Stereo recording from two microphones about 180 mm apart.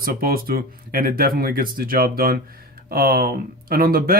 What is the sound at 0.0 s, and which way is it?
A man's voice, 55° right (ahead or behind).